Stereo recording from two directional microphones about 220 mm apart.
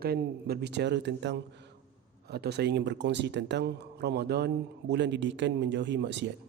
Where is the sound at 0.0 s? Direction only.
45° right (ahead or behind).